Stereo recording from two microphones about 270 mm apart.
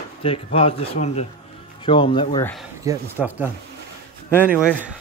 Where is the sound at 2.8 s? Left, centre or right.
Centre.